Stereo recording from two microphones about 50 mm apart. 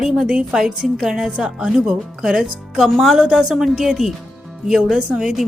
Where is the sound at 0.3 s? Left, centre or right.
Centre.